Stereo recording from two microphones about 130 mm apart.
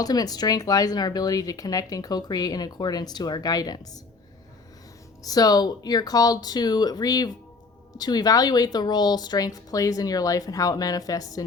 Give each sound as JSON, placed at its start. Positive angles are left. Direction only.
{"t": 0.0, "sound": "speech", "side_deg": 30}
{"t": 5.2, "sound": "speech", "side_deg": 30}